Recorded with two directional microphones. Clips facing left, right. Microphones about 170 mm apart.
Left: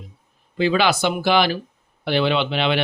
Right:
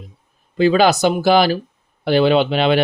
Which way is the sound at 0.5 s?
40° right (ahead or behind).